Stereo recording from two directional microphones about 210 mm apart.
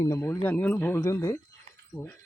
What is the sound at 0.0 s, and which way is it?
Speech, 15° left (ahead or behind).